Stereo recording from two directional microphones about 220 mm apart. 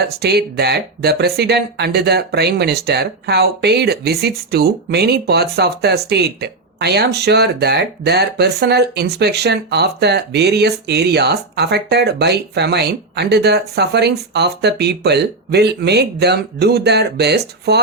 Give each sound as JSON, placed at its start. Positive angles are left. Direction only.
{"t": 0.0, "sound": "speech", "side_deg": -50}